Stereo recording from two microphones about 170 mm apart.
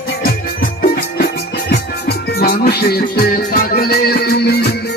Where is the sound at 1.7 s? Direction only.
65° left (ahead or behind).